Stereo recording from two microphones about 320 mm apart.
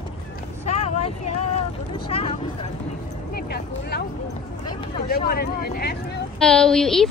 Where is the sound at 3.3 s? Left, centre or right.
Left.